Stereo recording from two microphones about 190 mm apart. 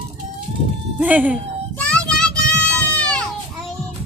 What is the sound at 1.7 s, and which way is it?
Children playing, 5° left (ahead or behind).